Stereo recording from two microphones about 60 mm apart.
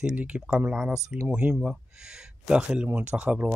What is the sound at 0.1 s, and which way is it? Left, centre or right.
Speech, right.